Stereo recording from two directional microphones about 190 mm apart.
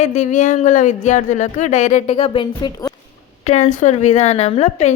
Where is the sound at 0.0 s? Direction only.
40° left (ahead or behind).